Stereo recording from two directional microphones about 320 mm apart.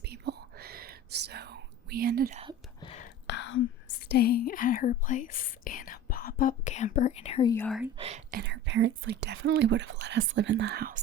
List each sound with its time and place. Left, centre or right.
0.0 s whispering: right
2.8 s whispering: left
3.2 s whispering: left
4.1 s speech: left; by 7.9 s centre
7.9 s speech: centre